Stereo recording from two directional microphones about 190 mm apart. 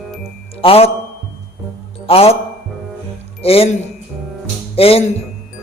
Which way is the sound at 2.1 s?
30° left (ahead or behind).